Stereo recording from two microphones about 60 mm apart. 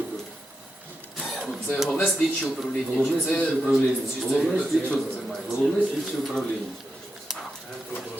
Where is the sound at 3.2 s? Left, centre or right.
Left.